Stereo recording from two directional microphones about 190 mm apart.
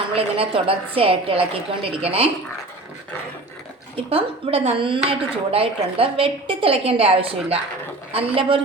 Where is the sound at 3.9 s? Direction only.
30° right (ahead or behind).